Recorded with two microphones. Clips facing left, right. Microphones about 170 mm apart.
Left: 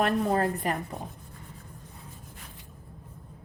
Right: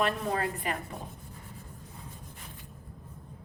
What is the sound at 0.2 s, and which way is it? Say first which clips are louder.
Speech: left 6 dB; 40° left (ahead or behind).